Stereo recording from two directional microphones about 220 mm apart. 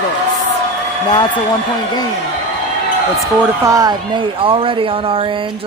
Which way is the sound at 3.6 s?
15° right (ahead or behind).